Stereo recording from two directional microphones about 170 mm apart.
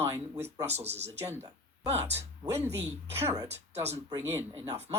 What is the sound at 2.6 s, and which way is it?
A woman's voice, 15° right (ahead or behind).